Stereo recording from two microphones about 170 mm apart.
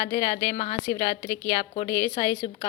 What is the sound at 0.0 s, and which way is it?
Speech, 30° left (ahead or behind).